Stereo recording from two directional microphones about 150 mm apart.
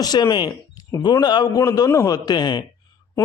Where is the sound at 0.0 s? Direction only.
25° left (ahead or behind).